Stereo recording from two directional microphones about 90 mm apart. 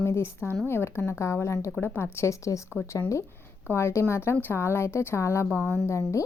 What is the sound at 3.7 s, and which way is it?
A woman's voice, 30° left (ahead or behind).